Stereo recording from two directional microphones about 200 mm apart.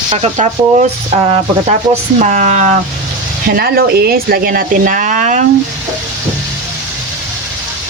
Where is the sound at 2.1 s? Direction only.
40° right (ahead or behind).